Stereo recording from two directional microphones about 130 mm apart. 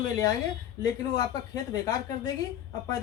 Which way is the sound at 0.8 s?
30° left (ahead or behind).